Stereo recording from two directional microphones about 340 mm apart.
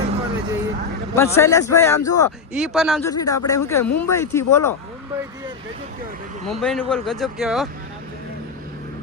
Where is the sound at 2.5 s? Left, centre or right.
Centre.